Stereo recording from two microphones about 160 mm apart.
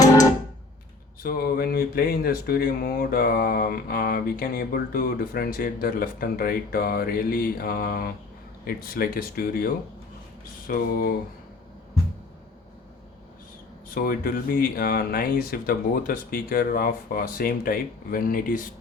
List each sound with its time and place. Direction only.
1.2 s speech: 70° left (ahead or behind)
13.9 s speech: 60° left (ahead or behind)